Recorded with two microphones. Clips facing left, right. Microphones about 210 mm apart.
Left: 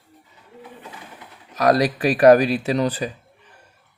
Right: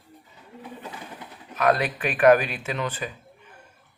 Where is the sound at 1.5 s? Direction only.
35° left (ahead or behind).